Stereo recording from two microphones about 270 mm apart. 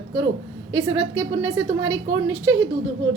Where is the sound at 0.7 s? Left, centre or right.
Centre.